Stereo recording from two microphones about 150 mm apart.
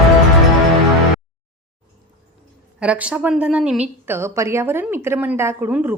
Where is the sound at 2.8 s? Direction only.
10° right (ahead or behind).